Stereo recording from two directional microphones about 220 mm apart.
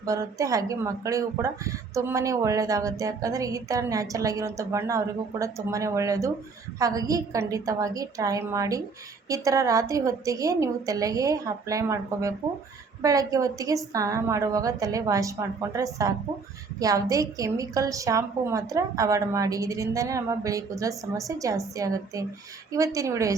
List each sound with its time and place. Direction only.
0.0 s speech: 15° right (ahead or behind)